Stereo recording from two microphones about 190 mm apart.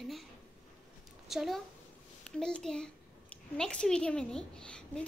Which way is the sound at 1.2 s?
Centre (ahead or behind).